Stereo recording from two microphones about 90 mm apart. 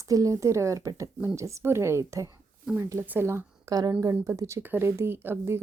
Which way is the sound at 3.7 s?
45° right (ahead or behind).